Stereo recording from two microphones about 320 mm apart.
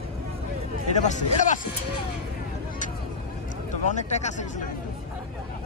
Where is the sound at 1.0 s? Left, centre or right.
Left.